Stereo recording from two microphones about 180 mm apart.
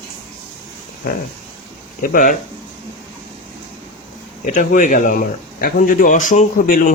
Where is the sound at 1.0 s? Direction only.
55° left (ahead or behind).